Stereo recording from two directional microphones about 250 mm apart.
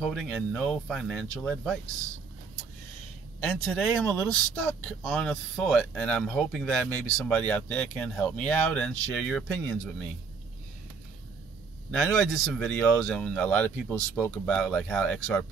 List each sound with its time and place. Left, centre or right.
0.0 s speech: centre
3.4 s speech: centre
11.9 s speech: centre